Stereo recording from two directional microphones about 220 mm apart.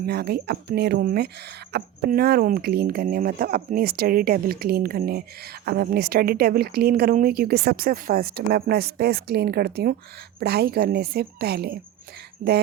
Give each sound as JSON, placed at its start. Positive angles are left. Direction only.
{"t": 0.0, "sound": "speech", "side_deg": -45}